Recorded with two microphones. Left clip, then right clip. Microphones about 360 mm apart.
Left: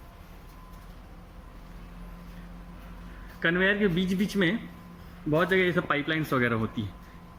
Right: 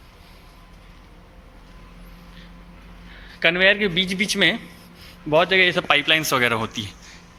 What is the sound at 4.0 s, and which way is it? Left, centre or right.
Speech, right.